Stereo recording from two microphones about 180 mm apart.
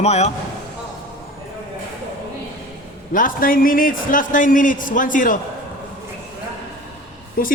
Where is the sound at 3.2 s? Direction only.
50° left (ahead or behind).